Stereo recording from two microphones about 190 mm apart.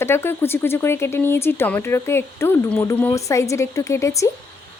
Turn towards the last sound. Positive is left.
turn(degrees=15)  # may be behind; listen again after turning